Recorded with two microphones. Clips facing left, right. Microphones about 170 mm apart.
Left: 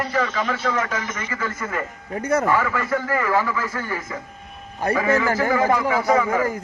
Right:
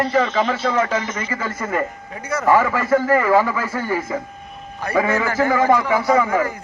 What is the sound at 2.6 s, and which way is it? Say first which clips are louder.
Speech: right 6 dB; 35° right (ahead or behind).